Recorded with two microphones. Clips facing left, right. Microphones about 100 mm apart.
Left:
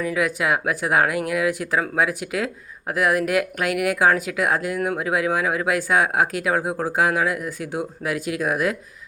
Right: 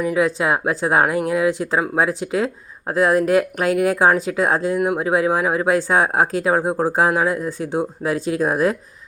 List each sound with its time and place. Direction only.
0.0 s speech: 25° right (ahead or behind)
4.8 s speech: 20° right (ahead or behind)
5.0 s speech: 30° right (ahead or behind)